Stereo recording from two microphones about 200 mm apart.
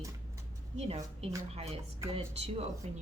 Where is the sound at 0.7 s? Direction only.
30° right (ahead or behind).